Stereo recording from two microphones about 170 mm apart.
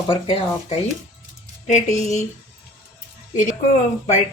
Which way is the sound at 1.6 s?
45° left (ahead or behind).